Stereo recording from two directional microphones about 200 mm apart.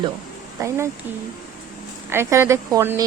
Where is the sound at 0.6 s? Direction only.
15° right (ahead or behind).